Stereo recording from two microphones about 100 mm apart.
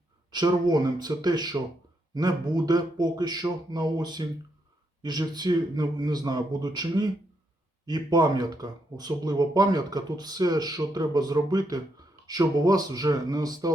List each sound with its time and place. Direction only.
0.3 s speech: 45° right (ahead or behind)